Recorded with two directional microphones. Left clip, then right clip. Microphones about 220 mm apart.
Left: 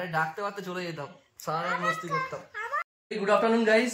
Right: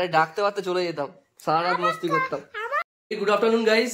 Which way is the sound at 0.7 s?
50° right (ahead or behind).